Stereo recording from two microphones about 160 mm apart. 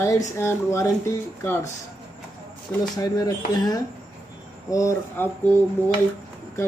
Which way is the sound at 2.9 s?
20° left (ahead or behind).